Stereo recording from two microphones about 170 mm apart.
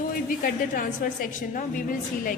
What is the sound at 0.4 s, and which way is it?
A woman's voice, 55° left (ahead or behind).